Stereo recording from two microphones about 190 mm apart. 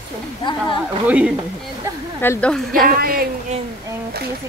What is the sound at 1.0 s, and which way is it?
Speech, 5° right (ahead or behind).